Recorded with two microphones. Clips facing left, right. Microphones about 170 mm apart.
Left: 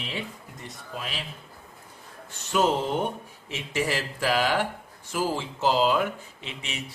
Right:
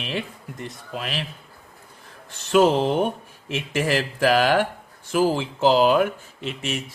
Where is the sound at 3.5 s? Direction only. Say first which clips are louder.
Right 5 dB; 55° right (ahead or behind).